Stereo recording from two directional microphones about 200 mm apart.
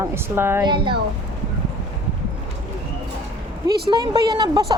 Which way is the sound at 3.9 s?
20° right (ahead or behind).